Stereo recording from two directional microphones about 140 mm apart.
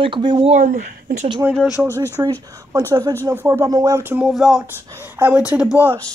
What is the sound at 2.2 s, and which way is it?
Speech, 20° right (ahead or behind).